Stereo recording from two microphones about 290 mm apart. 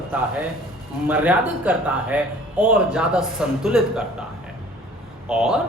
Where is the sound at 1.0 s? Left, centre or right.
Centre.